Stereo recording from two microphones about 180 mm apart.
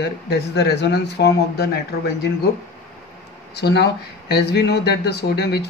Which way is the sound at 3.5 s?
70° left (ahead or behind).